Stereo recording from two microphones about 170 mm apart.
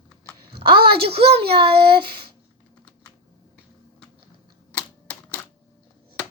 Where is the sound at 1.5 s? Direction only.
30° right (ahead or behind).